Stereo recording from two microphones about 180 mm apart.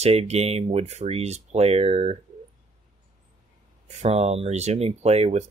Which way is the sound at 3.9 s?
40° right (ahead or behind).